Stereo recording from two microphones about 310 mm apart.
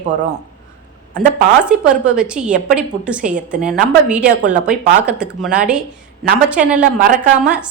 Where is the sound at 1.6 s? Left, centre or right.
Centre.